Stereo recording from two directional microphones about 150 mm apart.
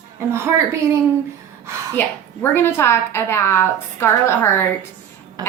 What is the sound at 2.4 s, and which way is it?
A woman's voice, 15° left (ahead or behind).